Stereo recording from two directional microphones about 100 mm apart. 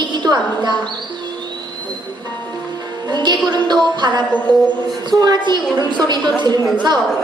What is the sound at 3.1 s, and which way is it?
A woman's voice, 45° right (ahead or behind).